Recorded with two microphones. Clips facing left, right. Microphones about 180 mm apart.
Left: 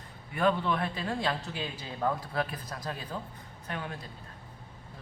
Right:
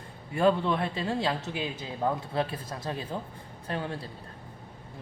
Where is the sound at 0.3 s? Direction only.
30° right (ahead or behind).